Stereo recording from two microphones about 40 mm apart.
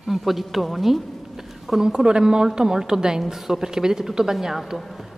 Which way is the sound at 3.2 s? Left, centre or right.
Centre.